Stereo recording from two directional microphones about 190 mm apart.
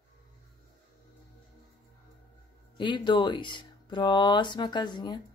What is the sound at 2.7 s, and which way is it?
Speech, 25° left (ahead or behind).